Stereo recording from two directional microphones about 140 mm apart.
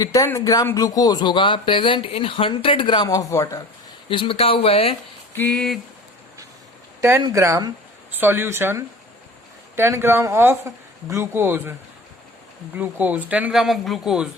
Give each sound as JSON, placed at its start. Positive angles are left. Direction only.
{"t": 0.0, "sound": "speech", "side_deg": 25}
{"t": 4.1, "sound": "speech", "side_deg": 40}
{"t": 5.3, "sound": "a sound", "side_deg": 10}
{"t": 7.3, "sound": "speech", "side_deg": -20}
{"t": 12.7, "sound": "speech", "side_deg": -10}